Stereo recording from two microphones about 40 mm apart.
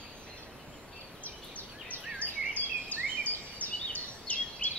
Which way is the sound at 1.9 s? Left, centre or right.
Left.